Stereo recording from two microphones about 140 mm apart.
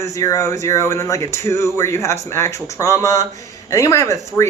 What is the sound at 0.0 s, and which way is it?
Speech, 25° left (ahead or behind).